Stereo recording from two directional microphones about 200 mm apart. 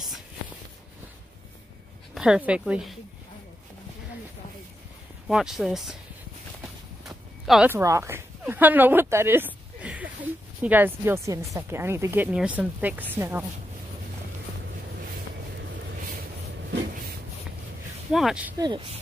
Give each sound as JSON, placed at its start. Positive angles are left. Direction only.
{"t": 2.1, "sound": "speech", "side_deg": -5}
{"t": 5.3, "sound": "speech", "side_deg": -5}
{"t": 7.1, "sound": "a woman's voice", "side_deg": 0}
{"t": 18.1, "sound": "speech", "side_deg": -5}
{"t": 18.6, "sound": "speech", "side_deg": -25}